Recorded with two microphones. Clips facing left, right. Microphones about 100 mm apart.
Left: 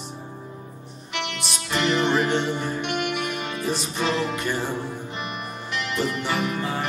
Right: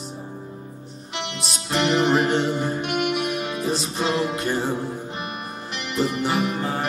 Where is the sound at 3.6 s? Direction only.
15° right (ahead or behind).